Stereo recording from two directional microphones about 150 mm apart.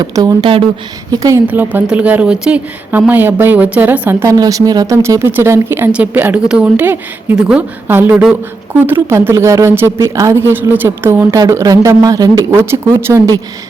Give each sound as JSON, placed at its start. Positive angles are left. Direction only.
{"t": 0.0, "sound": "a woman's voice", "side_deg": -25}
{"t": 1.5, "sound": "a woman's voice", "side_deg": -10}